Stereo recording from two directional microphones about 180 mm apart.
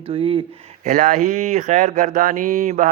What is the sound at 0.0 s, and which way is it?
Speech, 30° right (ahead or behind).